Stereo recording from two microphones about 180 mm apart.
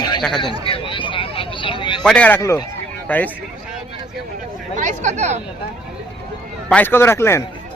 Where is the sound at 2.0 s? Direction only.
5° left (ahead or behind).